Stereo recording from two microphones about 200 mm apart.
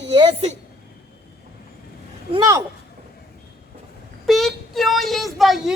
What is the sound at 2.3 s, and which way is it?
Speech, 20° right (ahead or behind).